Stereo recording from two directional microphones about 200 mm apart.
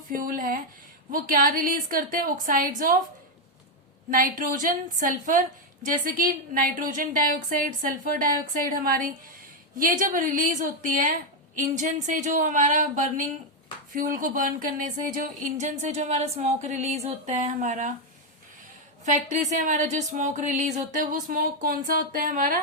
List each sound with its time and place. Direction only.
0.1 s a woman's voice: 45° right (ahead or behind)
4.1 s a woman's voice: 45° right (ahead or behind)
19.0 s speech: 35° right (ahead or behind)